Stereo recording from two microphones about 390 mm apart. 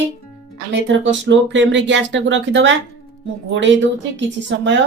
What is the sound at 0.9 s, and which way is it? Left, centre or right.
Speech, right.